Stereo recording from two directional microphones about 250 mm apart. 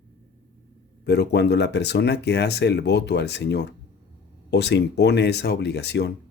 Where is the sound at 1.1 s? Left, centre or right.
Left.